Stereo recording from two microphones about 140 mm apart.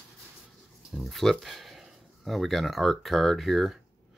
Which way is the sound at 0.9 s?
Centre (ahead or behind).